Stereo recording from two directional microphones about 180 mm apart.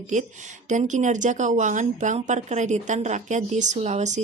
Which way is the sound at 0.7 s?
40° right (ahead or behind).